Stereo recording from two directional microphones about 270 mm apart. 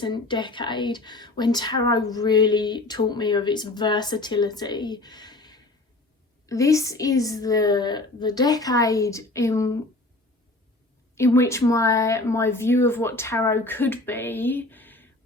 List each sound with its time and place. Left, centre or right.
0.0 s speech: centre
11.1 s speech: centre